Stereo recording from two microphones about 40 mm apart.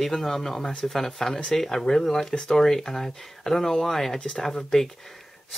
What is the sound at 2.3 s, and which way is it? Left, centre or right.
Speech, left.